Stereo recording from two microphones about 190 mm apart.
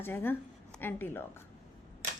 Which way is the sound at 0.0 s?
10° left (ahead or behind).